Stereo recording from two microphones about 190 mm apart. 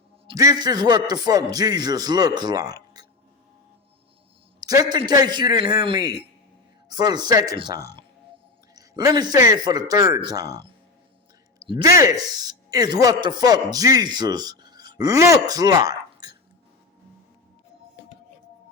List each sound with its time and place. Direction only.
0.3 s a man's voice: 20° right (ahead or behind)
4.6 s a man's voice: 20° right (ahead or behind)
11.6 s a man's voice: 20° right (ahead or behind)